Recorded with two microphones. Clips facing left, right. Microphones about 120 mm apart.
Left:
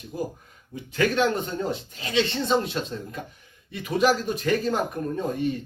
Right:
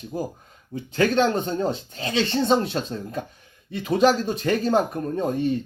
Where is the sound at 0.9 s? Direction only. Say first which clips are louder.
Right 2 dB; 30° right (ahead or behind).